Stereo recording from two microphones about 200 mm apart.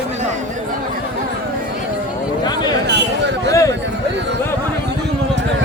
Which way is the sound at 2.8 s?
60° right (ahead or behind).